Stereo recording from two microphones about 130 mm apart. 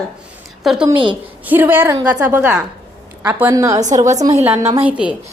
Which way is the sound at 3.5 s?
25° right (ahead or behind).